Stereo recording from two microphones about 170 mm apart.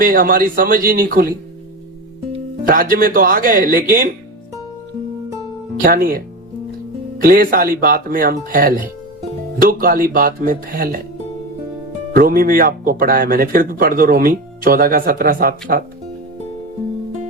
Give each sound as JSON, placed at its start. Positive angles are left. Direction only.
{"t": 0.0, "sound": "speech", "side_deg": -55}
{"t": 2.6, "sound": "speech", "side_deg": -55}
{"t": 5.8, "sound": "speech", "side_deg": -60}
{"t": 12.1, "sound": "speech", "side_deg": -60}